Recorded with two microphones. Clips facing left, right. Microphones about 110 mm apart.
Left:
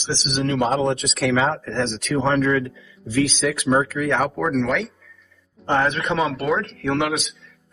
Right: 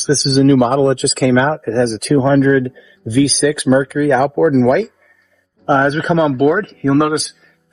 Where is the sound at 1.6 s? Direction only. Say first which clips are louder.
Right 9 dB; 90° right.